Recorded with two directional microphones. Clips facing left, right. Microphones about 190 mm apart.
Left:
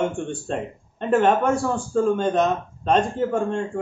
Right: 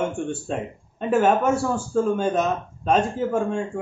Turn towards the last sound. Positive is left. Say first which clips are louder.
# left 1 dB
turn(degrees=-5)  # may be behind; listen again after turning